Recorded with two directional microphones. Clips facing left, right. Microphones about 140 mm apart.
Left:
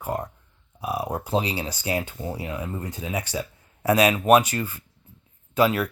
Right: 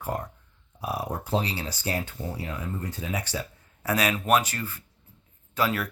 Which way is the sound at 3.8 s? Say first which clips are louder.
Left 6 dB; 20° left (ahead or behind).